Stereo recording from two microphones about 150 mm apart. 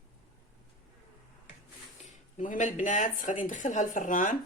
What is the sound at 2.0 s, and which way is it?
Speech, 60° left (ahead or behind).